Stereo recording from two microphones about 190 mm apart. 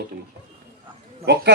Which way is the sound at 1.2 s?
60° right (ahead or behind).